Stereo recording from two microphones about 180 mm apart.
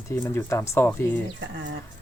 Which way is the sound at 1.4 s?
75° right (ahead or behind).